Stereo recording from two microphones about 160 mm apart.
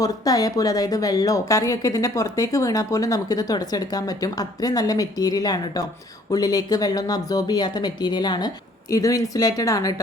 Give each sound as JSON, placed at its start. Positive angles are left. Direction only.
{"t": 0.0, "sound": "speech", "side_deg": 20}